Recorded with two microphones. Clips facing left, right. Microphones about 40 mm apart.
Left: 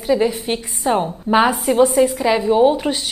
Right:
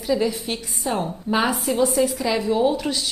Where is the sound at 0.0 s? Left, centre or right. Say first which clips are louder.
Left 5 dB; left.